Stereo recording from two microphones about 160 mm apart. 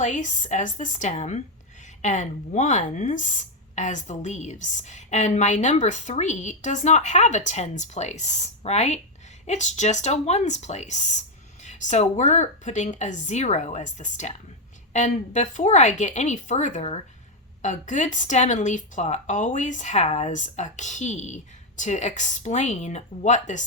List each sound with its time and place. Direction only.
0.0 s speech: 50° left (ahead or behind)